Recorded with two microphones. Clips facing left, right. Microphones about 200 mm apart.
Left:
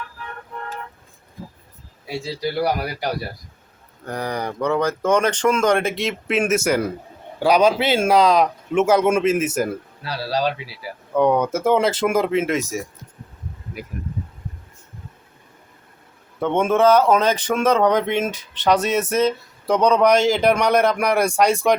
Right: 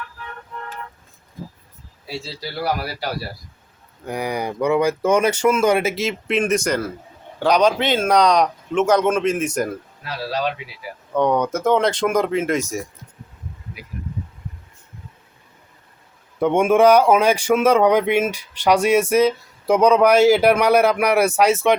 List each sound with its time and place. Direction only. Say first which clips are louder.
2.0 s speech: left 5 dB; 15° left (ahead or behind)
4.0 s speech: right 1 dB; 10° right (ahead or behind); by 9.6 s 5° left (ahead or behind)
10.0 s speech: left 2 dB; 35° left (ahead or behind)
11.1 s speech: left 1 dB; 5° left (ahead or behind)
13.8 s speech: left 7 dB; 50° left (ahead or behind)
16.4 s speech: right 3 dB; 10° right (ahead or behind)